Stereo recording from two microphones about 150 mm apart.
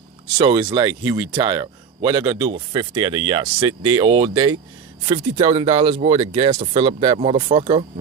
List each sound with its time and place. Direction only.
0.3 s speech: 30° right (ahead or behind)